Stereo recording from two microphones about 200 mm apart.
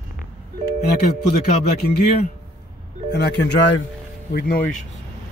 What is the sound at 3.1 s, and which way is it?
Speech, 55° left (ahead or behind).